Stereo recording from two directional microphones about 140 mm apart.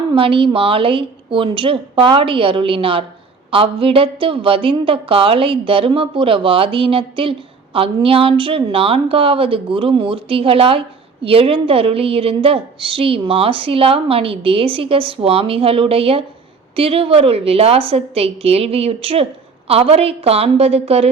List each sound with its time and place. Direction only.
0.1 s a woman's voice: 40° right (ahead or behind)